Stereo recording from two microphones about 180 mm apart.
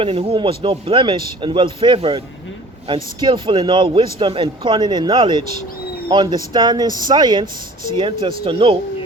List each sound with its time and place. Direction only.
0.0 s a man's voice: 30° right (ahead or behind)